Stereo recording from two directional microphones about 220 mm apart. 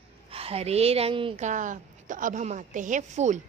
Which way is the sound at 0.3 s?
25° right (ahead or behind).